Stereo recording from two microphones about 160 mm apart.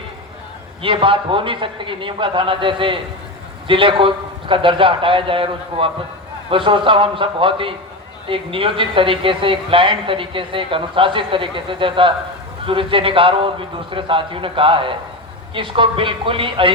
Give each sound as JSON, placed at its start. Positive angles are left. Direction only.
{"t": 0.8, "sound": "speech", "side_deg": -35}